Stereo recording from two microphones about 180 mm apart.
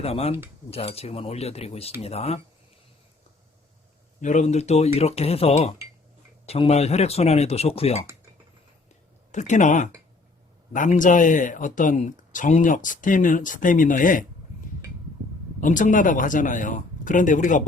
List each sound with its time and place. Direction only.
0.0 s speech: 35° left (ahead or behind)
4.2 s speech: 40° left (ahead or behind)
9.3 s speech: 40° left (ahead or behind)
15.6 s speech: 45° left (ahead or behind)